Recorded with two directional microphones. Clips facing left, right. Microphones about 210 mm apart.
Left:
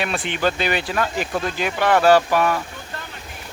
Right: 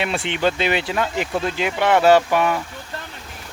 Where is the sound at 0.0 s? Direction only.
25° right (ahead or behind).